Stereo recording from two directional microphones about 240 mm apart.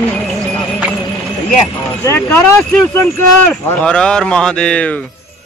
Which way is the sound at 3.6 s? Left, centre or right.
Centre.